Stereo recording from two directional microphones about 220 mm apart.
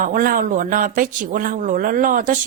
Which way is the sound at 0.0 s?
40° right (ahead or behind).